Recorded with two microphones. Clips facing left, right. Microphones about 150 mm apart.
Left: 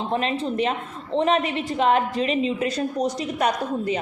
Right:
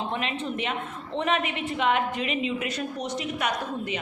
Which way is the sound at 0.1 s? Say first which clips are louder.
Left 6 dB; 35° left (ahead or behind).